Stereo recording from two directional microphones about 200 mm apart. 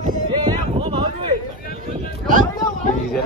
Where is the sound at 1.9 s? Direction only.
40° right (ahead or behind).